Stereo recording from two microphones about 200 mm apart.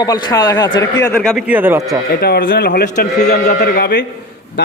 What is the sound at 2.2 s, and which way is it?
A man's voice, 55° left (ahead or behind).